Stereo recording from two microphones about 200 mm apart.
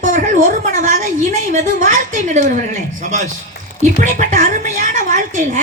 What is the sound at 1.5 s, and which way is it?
Speech, 40° right (ahead or behind).